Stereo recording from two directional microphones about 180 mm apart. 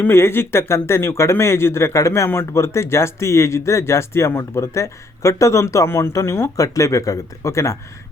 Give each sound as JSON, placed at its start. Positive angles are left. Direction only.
{"t": 0.0, "sound": "speech", "side_deg": 15}